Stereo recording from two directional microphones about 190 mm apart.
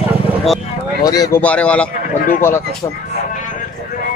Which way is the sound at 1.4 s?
5° left (ahead or behind).